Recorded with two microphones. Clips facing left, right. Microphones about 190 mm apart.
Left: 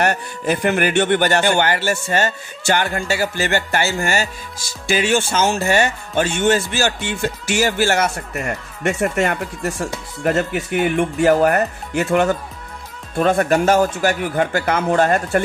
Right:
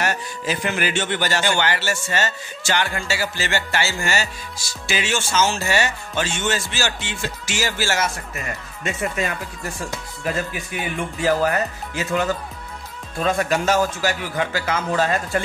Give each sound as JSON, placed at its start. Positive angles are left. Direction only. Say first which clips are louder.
{"t": 0.0, "sound": "speech", "louder": "left 5 dB", "side_deg": 55}
{"t": 9.1, "sound": "speech", "louder": "left 6 dB", "side_deg": 65}